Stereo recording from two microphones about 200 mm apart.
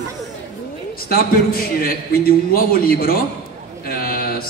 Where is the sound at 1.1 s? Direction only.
45° left (ahead or behind).